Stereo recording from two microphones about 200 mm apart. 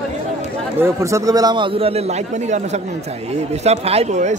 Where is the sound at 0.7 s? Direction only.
15° right (ahead or behind).